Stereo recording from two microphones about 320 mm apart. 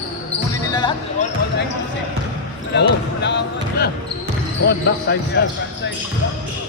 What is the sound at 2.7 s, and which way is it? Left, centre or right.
Speech, left.